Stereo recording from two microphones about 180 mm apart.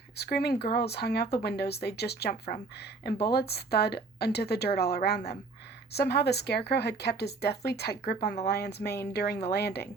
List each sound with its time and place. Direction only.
0.2 s speech: 60° left (ahead or behind)